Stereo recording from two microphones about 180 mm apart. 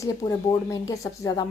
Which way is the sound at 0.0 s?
20° left (ahead or behind).